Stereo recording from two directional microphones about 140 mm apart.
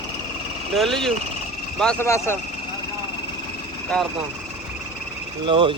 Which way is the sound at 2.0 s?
20° left (ahead or behind).